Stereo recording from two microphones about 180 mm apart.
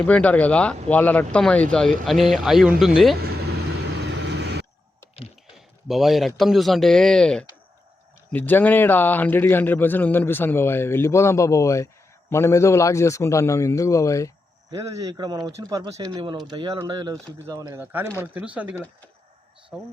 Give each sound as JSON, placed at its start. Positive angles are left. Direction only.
{"t": 0.0, "sound": "a man's voice", "side_deg": 10}
{"t": 3.8, "sound": "vehicle", "side_deg": -70}
{"t": 5.5, "sound": "a man's voice", "side_deg": 0}
{"t": 14.7, "sound": "a man's voice", "side_deg": -20}